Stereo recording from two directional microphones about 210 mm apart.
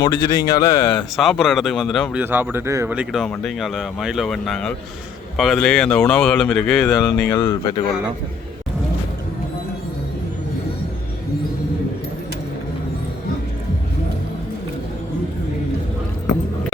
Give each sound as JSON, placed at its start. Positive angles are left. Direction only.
{"t": 0.0, "sound": "speech", "side_deg": 15}
{"t": 0.9, "sound": "speech", "side_deg": 0}
{"t": 2.2, "sound": "speech", "side_deg": -10}
{"t": 7.3, "sound": "speech", "side_deg": 15}